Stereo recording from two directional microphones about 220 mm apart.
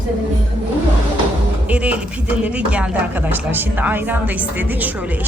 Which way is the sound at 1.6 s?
5° right (ahead or behind).